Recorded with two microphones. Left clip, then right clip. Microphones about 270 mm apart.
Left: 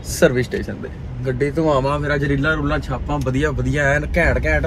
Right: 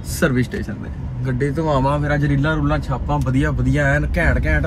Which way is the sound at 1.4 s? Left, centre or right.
Left.